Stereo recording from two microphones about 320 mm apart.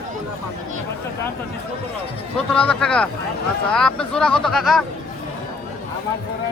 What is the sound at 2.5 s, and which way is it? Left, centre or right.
Speech, centre.